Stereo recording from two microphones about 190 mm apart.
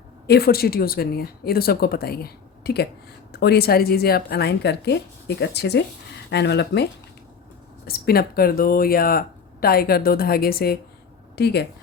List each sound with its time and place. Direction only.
0.3 s a woman's voice: 55° left (ahead or behind)
7.9 s speech: 55° left (ahead or behind)